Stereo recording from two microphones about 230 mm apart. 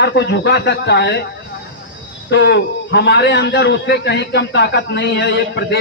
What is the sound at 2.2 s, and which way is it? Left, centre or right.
A man's voice, left.